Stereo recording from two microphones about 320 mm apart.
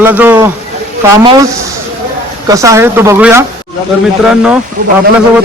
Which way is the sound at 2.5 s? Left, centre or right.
Centre.